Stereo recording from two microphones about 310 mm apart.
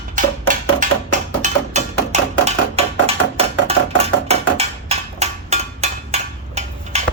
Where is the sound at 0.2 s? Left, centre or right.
Right.